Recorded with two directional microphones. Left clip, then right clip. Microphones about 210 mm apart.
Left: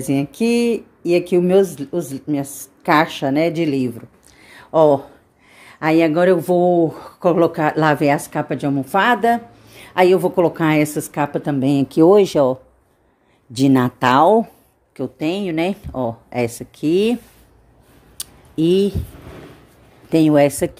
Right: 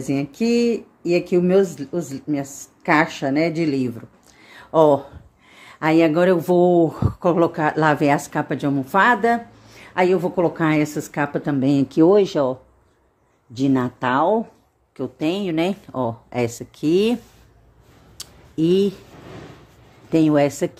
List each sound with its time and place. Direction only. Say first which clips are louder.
0.0 s speech: left 3 dB; 10° left (ahead or behind)
15.0 s speech: left 1 dB; 5° left (ahead or behind)
18.1 s a sound: left 3 dB; 10° left (ahead or behind)
20.1 s speech: left 3 dB; 10° left (ahead or behind)